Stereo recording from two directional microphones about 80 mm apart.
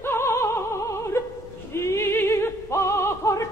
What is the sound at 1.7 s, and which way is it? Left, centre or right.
Music, left.